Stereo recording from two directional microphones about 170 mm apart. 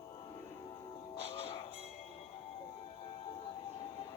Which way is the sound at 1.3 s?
35° left (ahead or behind).